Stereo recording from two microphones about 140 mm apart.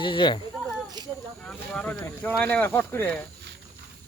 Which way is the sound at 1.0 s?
30° right (ahead or behind).